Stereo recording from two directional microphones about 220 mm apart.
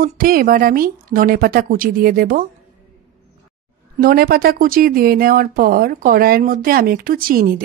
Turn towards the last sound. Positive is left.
turn(degrees=-40)  # may be behind; listen again after turning